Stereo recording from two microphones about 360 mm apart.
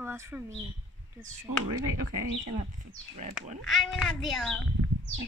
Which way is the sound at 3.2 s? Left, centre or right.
Centre.